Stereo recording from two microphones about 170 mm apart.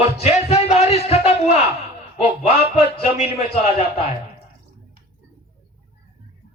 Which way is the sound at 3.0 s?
35° left (ahead or behind).